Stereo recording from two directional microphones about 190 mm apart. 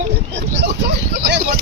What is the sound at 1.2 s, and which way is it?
Speech, 50° right (ahead or behind).